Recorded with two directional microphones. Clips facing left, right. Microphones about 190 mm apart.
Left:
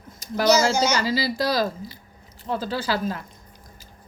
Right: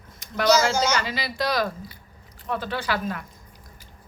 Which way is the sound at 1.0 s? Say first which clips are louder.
Left 4 dB; 30° left (ahead or behind).